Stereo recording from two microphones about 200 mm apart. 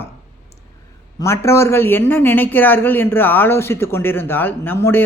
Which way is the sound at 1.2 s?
15° left (ahead or behind).